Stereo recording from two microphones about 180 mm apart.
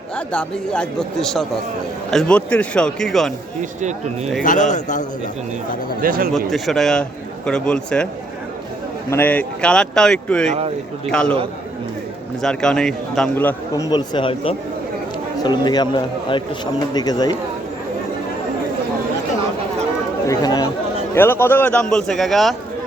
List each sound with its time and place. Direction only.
0.2 s a man's voice: 5° left (ahead or behind)
3.6 s speech: 40° right (ahead or behind)
4.4 s a man's voice: 45° left (ahead or behind)
6.0 s speech: 55° right (ahead or behind)
6.3 s a man's voice: centre (ahead or behind)
9.0 s a man's voice: 10° left (ahead or behind)
12.4 s a man's voice: 5° left (ahead or behind); by 17.3 s 20° left (ahead or behind)
20.2 s a man's voice: 20° left (ahead or behind); by 22.5 s centre (ahead or behind)